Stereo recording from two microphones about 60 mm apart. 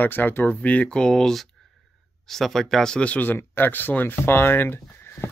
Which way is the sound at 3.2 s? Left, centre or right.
Left.